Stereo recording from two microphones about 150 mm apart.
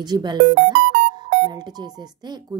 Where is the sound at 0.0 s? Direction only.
30° right (ahead or behind).